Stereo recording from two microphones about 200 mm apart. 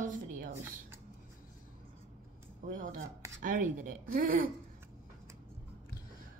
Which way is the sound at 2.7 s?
40° right (ahead or behind).